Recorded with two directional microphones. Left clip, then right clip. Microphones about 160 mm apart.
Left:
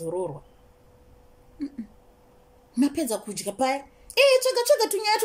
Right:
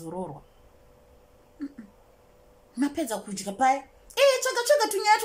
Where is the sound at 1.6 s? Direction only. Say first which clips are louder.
Left 3 dB; 15° left (ahead or behind).